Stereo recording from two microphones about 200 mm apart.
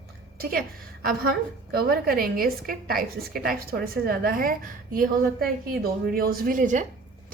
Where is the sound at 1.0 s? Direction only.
50° right (ahead or behind).